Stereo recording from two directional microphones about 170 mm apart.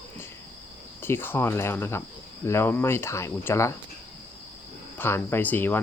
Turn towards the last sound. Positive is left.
turn(degrees=10)  # may be behind; listen again after turning